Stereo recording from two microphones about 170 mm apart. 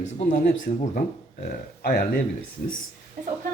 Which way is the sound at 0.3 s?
50° left (ahead or behind).